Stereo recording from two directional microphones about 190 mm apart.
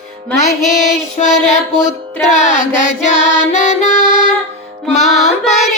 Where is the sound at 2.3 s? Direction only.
35° left (ahead or behind).